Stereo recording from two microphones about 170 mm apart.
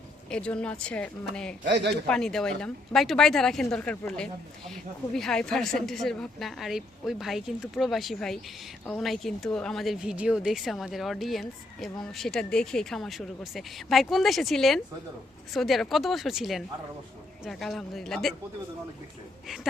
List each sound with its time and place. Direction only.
0.3 s speech: 5° left (ahead or behind)
1.6 s a man's voice: 90° right
2.0 s speech: 5° left (ahead or behind)